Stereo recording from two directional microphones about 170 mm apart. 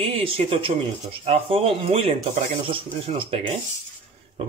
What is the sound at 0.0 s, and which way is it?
Speech, 35° right (ahead or behind).